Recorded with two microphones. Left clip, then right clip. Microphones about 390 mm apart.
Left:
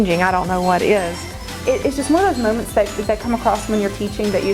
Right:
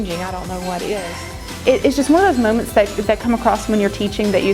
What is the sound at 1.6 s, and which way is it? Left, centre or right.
Speech, right.